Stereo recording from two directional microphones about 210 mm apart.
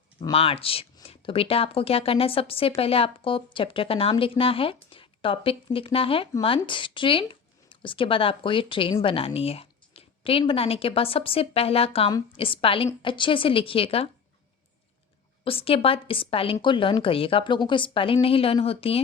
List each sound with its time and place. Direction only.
0.2 s speech: 25° left (ahead or behind)
15.4 s speech: 25° left (ahead or behind)